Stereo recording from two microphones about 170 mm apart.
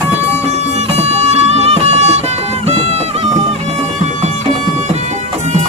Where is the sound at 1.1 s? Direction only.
40° right (ahead or behind).